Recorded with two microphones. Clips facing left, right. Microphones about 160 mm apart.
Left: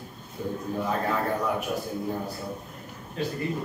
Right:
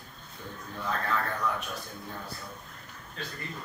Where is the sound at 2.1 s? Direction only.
25° left (ahead or behind).